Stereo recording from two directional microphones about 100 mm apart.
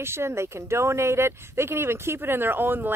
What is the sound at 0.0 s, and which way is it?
Speech, 25° right (ahead or behind).